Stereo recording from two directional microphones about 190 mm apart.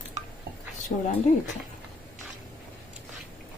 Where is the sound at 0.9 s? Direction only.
45° left (ahead or behind).